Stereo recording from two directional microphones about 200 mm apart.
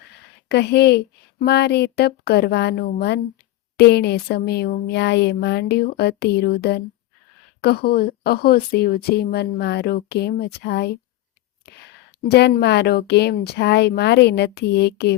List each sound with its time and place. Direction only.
0.4 s a woman's voice: 55° left (ahead or behind)
11.6 s a sound: 55° left (ahead or behind)
12.3 s a woman's voice: 55° left (ahead or behind)